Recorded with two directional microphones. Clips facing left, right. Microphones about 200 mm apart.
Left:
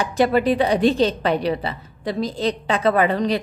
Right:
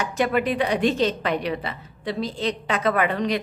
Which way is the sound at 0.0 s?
35° left (ahead or behind).